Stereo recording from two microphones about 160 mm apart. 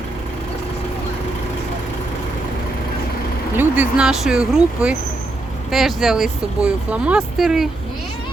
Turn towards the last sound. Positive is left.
turn(degrees=0)  # may be behind; listen again after turning